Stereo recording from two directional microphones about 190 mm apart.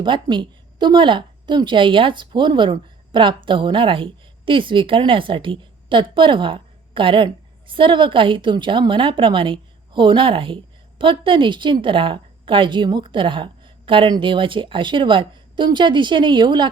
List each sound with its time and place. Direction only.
0.0 s a woman's voice: 25° right (ahead or behind)